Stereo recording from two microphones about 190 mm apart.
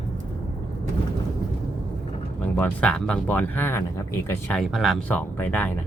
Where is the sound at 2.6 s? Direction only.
5° left (ahead or behind).